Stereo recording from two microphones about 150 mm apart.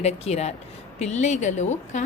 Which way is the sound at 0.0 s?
45° left (ahead or behind).